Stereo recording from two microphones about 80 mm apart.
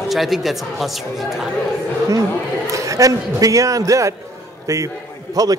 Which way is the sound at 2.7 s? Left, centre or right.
Right.